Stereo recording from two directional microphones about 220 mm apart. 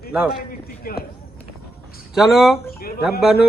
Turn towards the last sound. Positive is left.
turn(degrees=0)  # may be behind; listen again after turning